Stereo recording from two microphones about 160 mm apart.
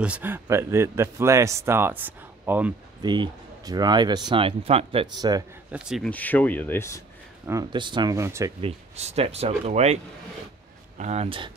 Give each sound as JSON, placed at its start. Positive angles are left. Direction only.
{"t": 0.0, "sound": "a man's voice", "side_deg": -10}
{"t": 3.0, "sound": "speech", "side_deg": -25}
{"t": 5.7, "sound": "a man's voice", "side_deg": -5}
{"t": 6.0, "sound": "speech", "side_deg": 10}
{"t": 7.7, "sound": "speech", "side_deg": -30}
{"t": 8.5, "sound": "speech", "side_deg": -40}
{"t": 11.0, "sound": "speech", "side_deg": -45}